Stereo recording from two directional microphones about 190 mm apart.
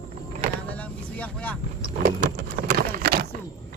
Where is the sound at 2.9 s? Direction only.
50° right (ahead or behind).